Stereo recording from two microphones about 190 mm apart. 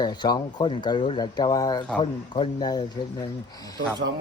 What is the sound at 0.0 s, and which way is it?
Speech, 20° left (ahead or behind).